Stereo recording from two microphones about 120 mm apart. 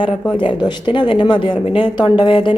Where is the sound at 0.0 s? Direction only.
40° left (ahead or behind).